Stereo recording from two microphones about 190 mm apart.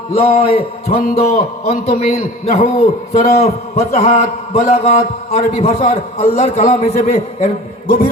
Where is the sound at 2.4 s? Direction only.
35° left (ahead or behind).